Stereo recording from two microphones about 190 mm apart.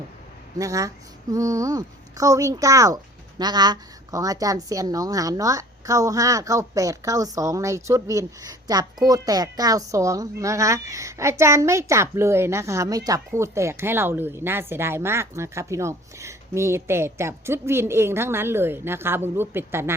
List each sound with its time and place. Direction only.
0.6 s a woman's voice: 15° right (ahead or behind)